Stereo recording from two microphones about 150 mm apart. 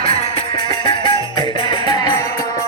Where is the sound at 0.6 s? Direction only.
30° left (ahead or behind).